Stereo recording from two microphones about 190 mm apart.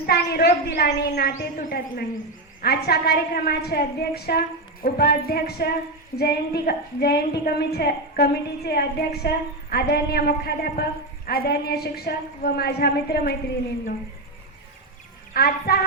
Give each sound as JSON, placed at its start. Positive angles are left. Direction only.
{"t": 0.0, "sound": "a woman's voice", "side_deg": 55}
{"t": 15.3, "sound": "a woman's voice", "side_deg": 55}